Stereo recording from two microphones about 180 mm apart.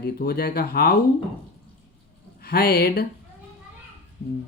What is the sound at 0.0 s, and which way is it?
Speech, 60° left (ahead or behind).